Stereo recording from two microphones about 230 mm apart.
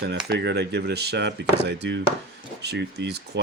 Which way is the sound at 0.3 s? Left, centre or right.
Right.